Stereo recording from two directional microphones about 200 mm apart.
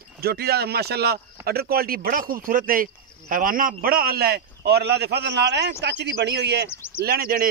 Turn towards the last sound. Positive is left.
turn(degrees=-50)  # may be behind; listen again after turning